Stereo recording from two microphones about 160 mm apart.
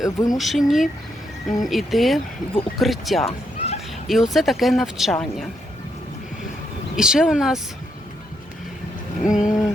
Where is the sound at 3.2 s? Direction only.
40° left (ahead or behind).